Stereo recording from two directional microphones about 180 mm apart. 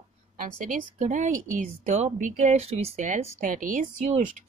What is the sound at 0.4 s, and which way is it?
A woman's voice, 45° right (ahead or behind).